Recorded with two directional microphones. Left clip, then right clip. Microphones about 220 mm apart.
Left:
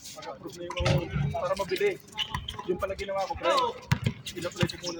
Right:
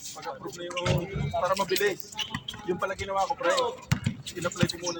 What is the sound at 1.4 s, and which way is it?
Speech, 45° right (ahead or behind).